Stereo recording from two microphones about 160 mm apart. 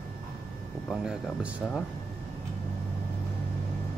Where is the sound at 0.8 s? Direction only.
5° right (ahead or behind).